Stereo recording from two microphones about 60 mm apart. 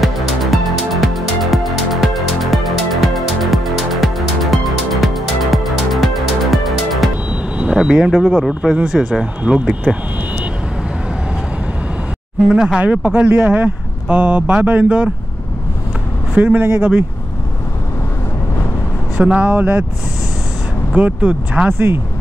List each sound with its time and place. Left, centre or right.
0.0 s music: centre
7.5 s speech: centre
12.5 s speech: centre
16.3 s speech: right
19.2 s speech: centre
20.9 s speech: right
21.6 s speech: right